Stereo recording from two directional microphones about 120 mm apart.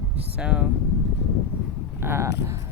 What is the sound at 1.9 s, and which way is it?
Speech, 20° right (ahead or behind).